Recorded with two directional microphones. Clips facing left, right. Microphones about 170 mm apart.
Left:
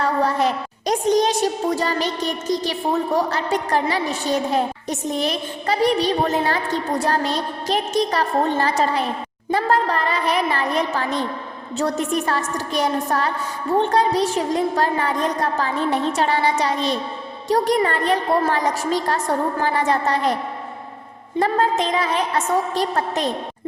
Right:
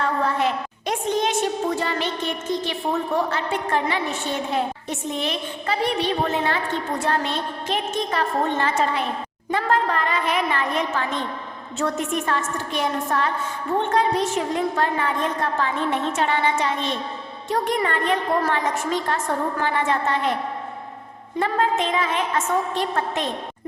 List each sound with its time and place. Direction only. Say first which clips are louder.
0.0 s a woman's voice: left 3 dB; 40° left (ahead or behind)
21.3 s a woman's voice: left 3 dB; 35° left (ahead or behind)